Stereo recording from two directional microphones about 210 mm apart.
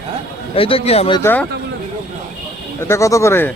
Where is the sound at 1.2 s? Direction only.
10° left (ahead or behind).